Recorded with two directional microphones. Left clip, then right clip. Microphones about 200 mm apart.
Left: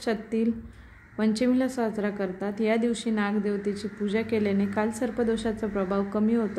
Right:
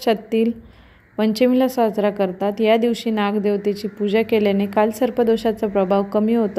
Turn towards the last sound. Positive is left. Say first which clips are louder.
# right 8 dB
turn(degrees=-30)  # may be behind; listen again after turning